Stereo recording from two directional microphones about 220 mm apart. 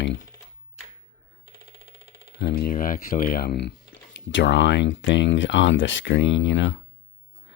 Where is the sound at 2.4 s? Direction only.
40° left (ahead or behind).